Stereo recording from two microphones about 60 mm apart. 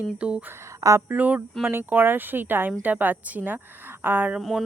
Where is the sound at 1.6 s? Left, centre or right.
Right.